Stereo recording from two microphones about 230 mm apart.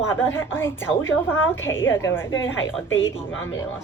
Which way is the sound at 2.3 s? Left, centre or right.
Left.